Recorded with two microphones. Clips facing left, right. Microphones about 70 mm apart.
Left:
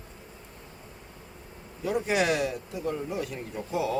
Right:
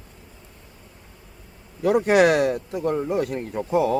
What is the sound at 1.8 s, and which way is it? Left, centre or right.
Speech, right.